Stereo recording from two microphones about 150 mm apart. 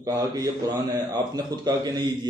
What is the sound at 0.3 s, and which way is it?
A man's voice, 25° right (ahead or behind).